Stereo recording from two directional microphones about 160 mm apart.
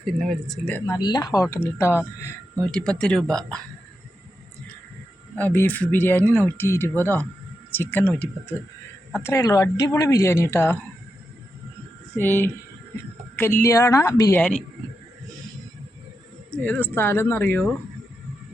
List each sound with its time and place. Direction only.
0.0 s speech: centre (ahead or behind)
0.9 s speech: 25° left (ahead or behind)
2.7 s speech: 5° left (ahead or behind)
5.4 s speech: 10° left (ahead or behind)
12.1 s speech: 15° left (ahead or behind)
13.6 s speech: 20° left (ahead or behind)
16.5 s speech: 10° left (ahead or behind)